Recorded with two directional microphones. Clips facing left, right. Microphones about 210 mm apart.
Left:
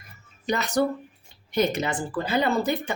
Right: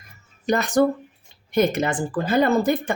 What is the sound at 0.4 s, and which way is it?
Speech, 50° right (ahead or behind).